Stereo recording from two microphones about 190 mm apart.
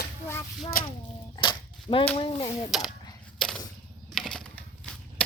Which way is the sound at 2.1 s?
25° left (ahead or behind).